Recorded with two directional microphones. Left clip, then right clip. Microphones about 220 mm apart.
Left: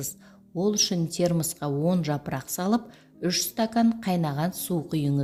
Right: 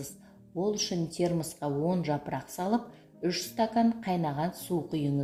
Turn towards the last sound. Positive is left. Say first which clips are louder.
# left 3 dB
turn(degrees=50)  # may be behind; listen again after turning